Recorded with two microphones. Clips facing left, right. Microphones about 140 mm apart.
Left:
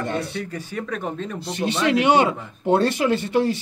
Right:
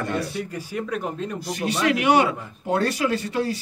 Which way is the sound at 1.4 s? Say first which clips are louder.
Left 2 dB; 25° left (ahead or behind).